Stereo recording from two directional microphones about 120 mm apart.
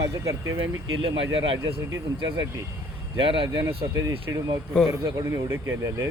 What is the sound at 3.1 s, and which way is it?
Speech, 45° right (ahead or behind).